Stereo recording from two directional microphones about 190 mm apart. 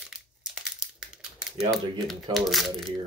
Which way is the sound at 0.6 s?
5° right (ahead or behind).